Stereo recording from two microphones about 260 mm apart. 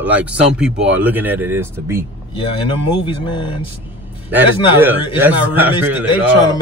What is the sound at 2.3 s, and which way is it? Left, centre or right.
Speech, centre.